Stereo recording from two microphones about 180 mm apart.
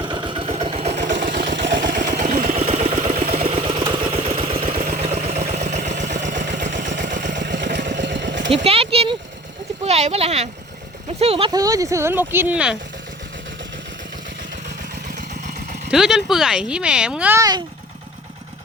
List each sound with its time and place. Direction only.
0.0 s vehicle: 25° right (ahead or behind)
1.1 s vehicle: 50° right (ahead or behind)
1.8 s engine: 45° right (ahead or behind)
2.6 s vehicle: 35° right (ahead or behind)
4.5 s a sound: 30° right (ahead or behind)
4.8 s vehicle: 40° right (ahead or behind)
7.4 s vehicle: 75° right (ahead or behind)
8.4 s a sound: 35° right (ahead or behind)
9.8 s speech: 35° right (ahead or behind); by 12.7 s 5° right (ahead or behind)
15.9 s speech: 5° right (ahead or behind)